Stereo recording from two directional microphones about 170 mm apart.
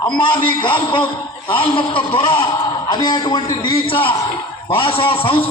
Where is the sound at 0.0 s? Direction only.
25° left (ahead or behind).